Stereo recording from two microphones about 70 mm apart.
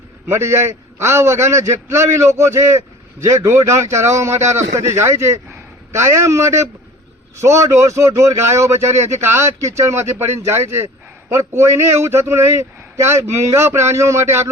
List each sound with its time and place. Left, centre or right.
0.3 s speech: right